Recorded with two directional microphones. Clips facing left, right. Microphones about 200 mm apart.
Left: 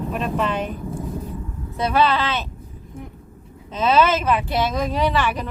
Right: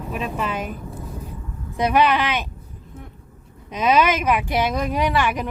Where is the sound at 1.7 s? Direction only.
15° right (ahead or behind).